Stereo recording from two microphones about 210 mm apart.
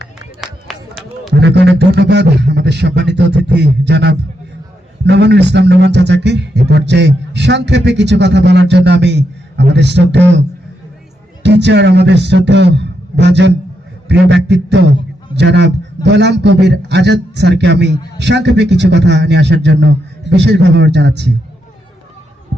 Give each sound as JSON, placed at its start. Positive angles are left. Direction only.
{"t": 0.4, "sound": "run", "side_deg": 0}
{"t": 1.3, "sound": "a man's voice", "side_deg": -55}
{"t": 11.4, "sound": "a man's voice", "side_deg": -55}